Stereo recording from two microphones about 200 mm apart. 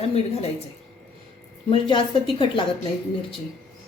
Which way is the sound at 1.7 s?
25° left (ahead or behind).